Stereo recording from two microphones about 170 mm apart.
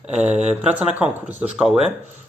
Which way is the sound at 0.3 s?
40° right (ahead or behind).